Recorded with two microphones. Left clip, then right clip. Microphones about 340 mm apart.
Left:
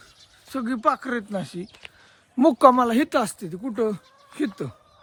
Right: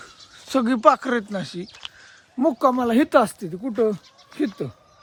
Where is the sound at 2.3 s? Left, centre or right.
Left.